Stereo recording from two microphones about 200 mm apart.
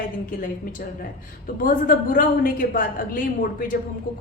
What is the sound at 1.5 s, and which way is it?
A woman's voice, 45° left (ahead or behind).